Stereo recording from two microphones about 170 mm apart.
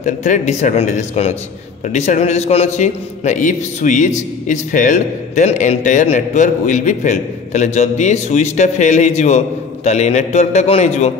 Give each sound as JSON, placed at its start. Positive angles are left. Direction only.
{"t": 0.0, "sound": "a man's voice", "side_deg": 45}